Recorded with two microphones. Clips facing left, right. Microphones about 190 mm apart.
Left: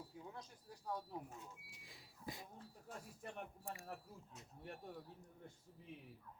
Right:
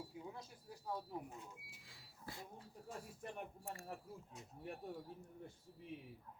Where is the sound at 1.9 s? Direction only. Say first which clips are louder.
Left 3 dB; 15° left (ahead or behind).